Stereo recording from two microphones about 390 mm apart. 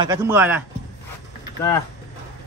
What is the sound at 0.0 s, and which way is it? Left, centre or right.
Speech, centre.